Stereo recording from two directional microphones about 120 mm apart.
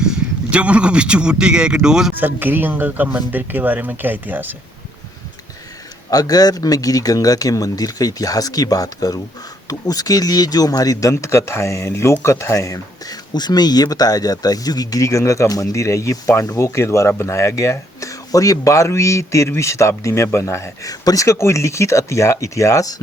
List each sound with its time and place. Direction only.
0.0 s a man's voice: 5° right (ahead or behind)
6.1 s speech: 30° left (ahead or behind)